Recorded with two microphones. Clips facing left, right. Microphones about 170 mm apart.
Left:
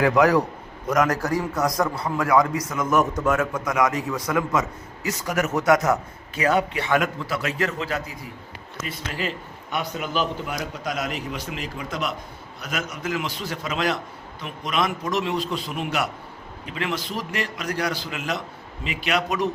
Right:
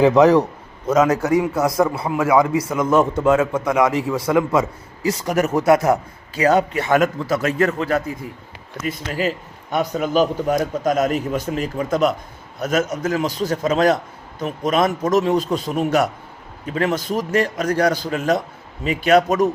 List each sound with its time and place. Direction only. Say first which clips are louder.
0.0 s a man's voice: right 6 dB; 25° right (ahead or behind)
1.5 s a man's voice: right 5 dB; 25° right (ahead or behind); by 8.1 s 50° right (ahead or behind)
9.7 s a man's voice: right 8 dB; 40° right (ahead or behind)